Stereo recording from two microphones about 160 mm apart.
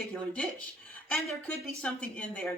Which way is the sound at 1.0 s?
5° left (ahead or behind).